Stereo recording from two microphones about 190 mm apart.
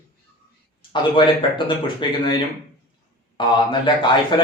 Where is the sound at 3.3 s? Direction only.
25° left (ahead or behind).